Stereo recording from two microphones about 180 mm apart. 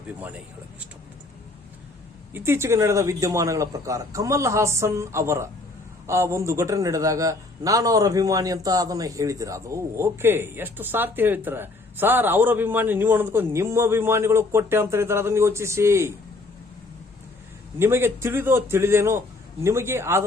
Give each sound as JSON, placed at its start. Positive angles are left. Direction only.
{"t": 2.3, "sound": "a man's voice", "side_deg": -15}
{"t": 17.7, "sound": "a man's voice", "side_deg": -15}